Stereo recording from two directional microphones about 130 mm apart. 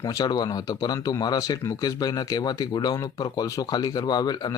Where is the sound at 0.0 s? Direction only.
30° left (ahead or behind).